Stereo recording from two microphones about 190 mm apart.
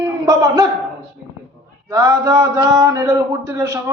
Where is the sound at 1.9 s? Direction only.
15° right (ahead or behind).